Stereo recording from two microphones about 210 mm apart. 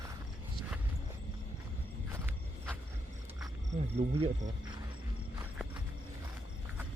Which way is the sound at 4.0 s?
30° right (ahead or behind).